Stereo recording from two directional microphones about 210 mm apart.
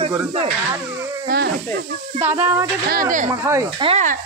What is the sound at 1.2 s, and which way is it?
Speech, 50° right (ahead or behind).